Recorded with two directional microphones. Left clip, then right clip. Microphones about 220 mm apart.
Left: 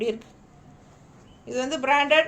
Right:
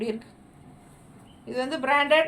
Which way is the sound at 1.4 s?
25° left (ahead or behind).